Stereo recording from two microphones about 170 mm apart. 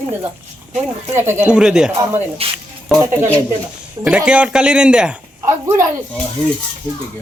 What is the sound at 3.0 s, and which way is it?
Speech, 15° right (ahead or behind).